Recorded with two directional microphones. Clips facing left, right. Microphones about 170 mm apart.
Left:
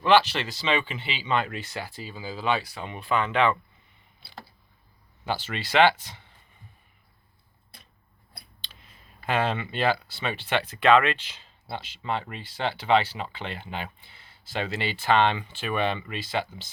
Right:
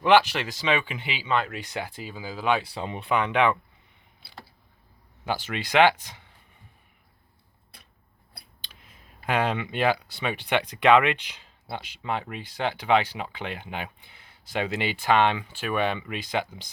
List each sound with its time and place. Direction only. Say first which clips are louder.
0.0 s speech: right 1 dB; 15° right (ahead or behind)
1.6 s speech: right 2 dB; 15° right (ahead or behind)
2.6 s speech: right 2 dB; 30° right (ahead or behind); by 3.6 s 15° right (ahead or behind)
5.2 s speech: right 1 dB; 10° right (ahead or behind)
8.6 s speech: even; 15° right (ahead or behind)